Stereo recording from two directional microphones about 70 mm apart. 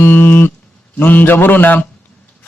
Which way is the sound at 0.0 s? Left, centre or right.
Left.